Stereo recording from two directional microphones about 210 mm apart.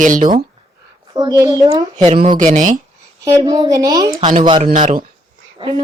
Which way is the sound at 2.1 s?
30° right (ahead or behind).